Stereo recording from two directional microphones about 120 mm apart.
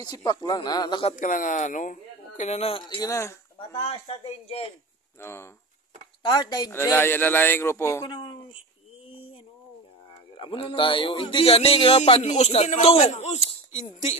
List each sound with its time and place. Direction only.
0.0 s speech: 35° left (ahead or behind)
1.1 s speech: 90° left; by 3.0 s 55° left (ahead or behind)
3.0 s a man's voice: 25° left (ahead or behind)
3.5 s a man's voice: 55° left (ahead or behind)
5.2 s a man's voice: 20° left (ahead or behind)
6.2 s speech: 35° left (ahead or behind)
6.7 s a man's voice: 20° left (ahead or behind)
8.1 s speech: 45° left (ahead or behind)
10.3 s speech: 45° left (ahead or behind)
12.1 s a man's voice: 70° left (ahead or behind)